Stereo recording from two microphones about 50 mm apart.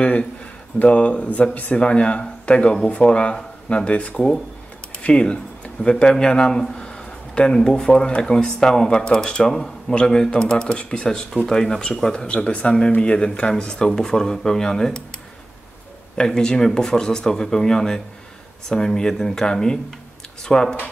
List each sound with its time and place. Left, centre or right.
0.0 s a man's voice: left
12.3 s speech: left
16.2 s speech: centre